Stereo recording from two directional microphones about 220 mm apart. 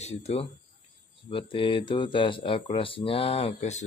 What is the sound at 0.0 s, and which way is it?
Speech, 30° left (ahead or behind).